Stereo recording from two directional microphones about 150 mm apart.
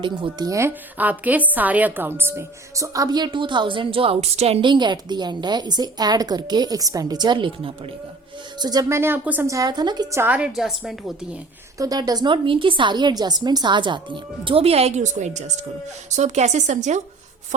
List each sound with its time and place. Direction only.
0.0 s a woman's voice: 30° right (ahead or behind); by 9.5 s 10° right (ahead or behind)
9.5 s a woman's voice: 25° right (ahead or behind)
10.2 s a woman's voice: 10° right (ahead or behind)
11.8 s speech: 25° right (ahead or behind); by 17.0 s 50° right (ahead or behind)